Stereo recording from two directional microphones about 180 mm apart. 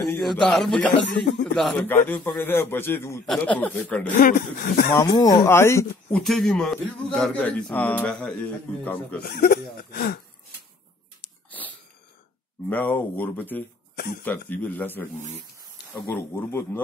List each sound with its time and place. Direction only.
0.2 s a man's voice: centre (ahead or behind)
0.9 s speech: 80° left
1.5 s a man's voice: 5° left (ahead or behind)
4.2 s speech: 50° left (ahead or behind)
4.9 s speech: 25° left (ahead or behind)
6.1 s a man's voice: 5° left (ahead or behind)
9.2 s speech: 55° left (ahead or behind)
12.6 s a man's voice: 10° left (ahead or behind)
13.9 s speech: 60° left (ahead or behind)
14.5 s a man's voice: 10° left (ahead or behind)